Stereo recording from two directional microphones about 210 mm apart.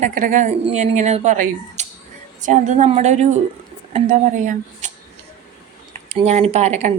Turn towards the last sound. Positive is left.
turn(degrees=-35)  # may be behind; listen again after turning